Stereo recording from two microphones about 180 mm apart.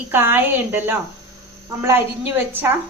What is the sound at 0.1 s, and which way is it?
Speech, 10° right (ahead or behind).